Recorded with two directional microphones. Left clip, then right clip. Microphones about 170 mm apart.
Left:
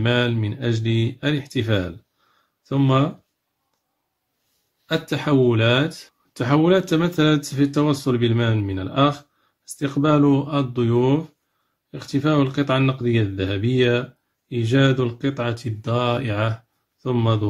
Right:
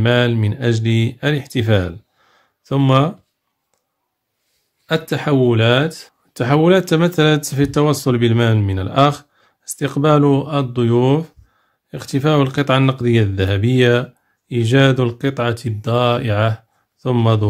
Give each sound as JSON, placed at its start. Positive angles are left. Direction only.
{"t": 0.0, "sound": "speech", "side_deg": -30}
{"t": 4.8, "sound": "speech", "side_deg": -25}